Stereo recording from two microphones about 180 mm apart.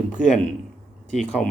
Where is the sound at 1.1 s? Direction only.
5° left (ahead or behind).